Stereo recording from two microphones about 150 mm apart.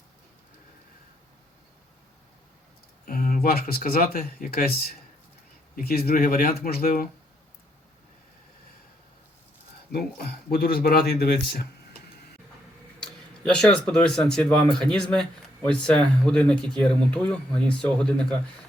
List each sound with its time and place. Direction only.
3.1 s speech: 70° left (ahead or behind)
9.9 s speech: 90° left
13.0 s speech: 5° left (ahead or behind)